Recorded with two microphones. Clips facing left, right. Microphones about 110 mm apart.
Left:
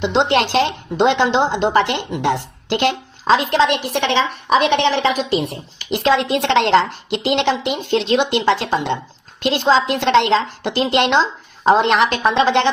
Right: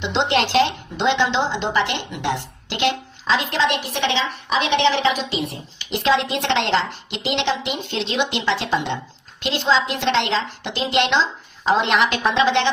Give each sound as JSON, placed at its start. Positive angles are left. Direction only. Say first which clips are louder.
{"t": 0.0, "sound": "a woman's voice", "louder": "left 4 dB", "side_deg": 45}